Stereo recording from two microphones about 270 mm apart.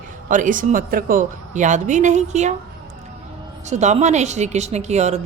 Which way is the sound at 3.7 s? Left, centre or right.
Right.